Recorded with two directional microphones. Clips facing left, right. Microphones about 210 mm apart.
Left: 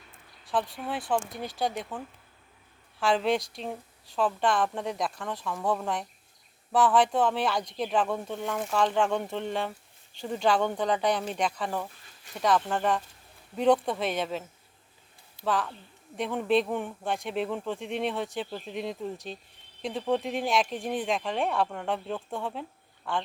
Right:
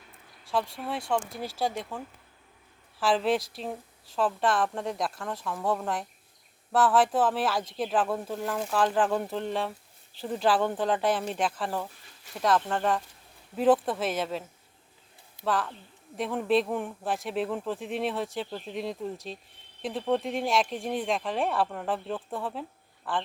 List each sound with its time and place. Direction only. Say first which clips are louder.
0.5 s speech: even; centre (ahead or behind)
15.4 s speech: even; centre (ahead or behind)